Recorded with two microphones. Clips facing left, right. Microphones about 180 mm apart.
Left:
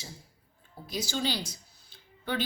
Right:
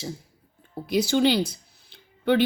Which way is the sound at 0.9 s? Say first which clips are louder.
Right 11 dB; 65° right (ahead or behind).